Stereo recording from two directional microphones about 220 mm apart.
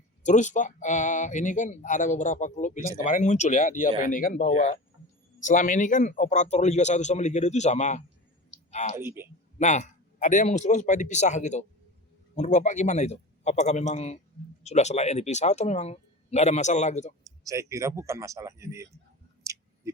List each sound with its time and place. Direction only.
0.2 s speech: 35° left (ahead or behind)
9.0 s speech: 10° right (ahead or behind)
9.6 s speech: 30° left (ahead or behind)
17.2 s speech: 15° right (ahead or behind)